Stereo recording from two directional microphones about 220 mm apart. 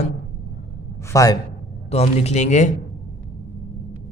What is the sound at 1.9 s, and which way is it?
Speech, 30° left (ahead or behind).